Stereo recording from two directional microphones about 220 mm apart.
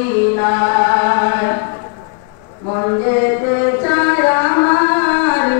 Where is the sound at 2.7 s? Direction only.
25° left (ahead or behind).